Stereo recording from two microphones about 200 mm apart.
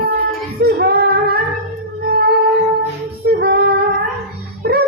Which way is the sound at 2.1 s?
50° right (ahead or behind).